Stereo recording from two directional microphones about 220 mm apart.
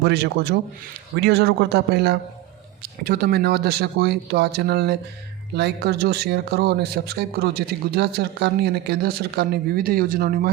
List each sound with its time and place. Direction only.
0.0 s speech: 50° right (ahead or behind)